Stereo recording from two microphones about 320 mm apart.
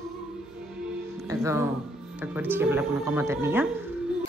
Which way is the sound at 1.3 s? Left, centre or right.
Centre.